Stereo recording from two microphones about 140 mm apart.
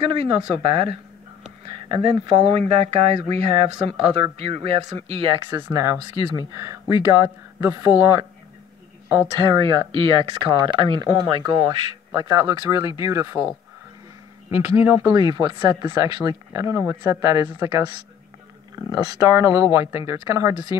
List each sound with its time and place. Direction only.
0.0 s speech: 40° right (ahead or behind)
5.5 s speech: 20° right (ahead or behind)
8.0 s speech: 35° right (ahead or behind)
9.4 s speech: 35° right (ahead or behind); by 13.5 s 20° right (ahead or behind)
14.5 s speech: 20° right (ahead or behind)